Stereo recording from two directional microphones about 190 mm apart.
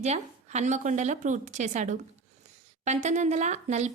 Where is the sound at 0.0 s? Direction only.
35° right (ahead or behind).